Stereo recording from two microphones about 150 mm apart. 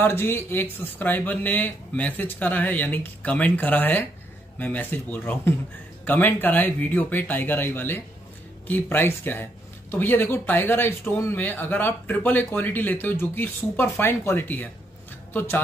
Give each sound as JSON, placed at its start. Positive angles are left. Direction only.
{"t": 0.0, "sound": "speech", "side_deg": 15}